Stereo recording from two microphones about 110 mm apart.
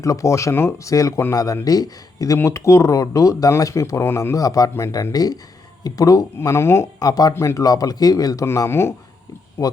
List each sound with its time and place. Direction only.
0.0 s speech: 30° left (ahead or behind)
7.0 s speech: 35° left (ahead or behind)
8.4 s speech: 25° left (ahead or behind)